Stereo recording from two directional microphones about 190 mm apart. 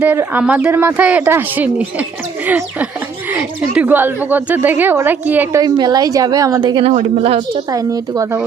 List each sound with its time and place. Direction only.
0.0 s a woman's voice: 10° right (ahead or behind); by 6.9 s 25° right (ahead or behind)
6.9 s speech: 35° right (ahead or behind)
7.7 s speech: 20° right (ahead or behind)